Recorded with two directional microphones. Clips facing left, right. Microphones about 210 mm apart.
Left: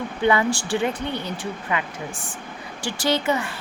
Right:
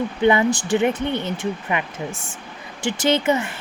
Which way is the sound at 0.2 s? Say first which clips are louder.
Right 3 dB; 20° right (ahead or behind).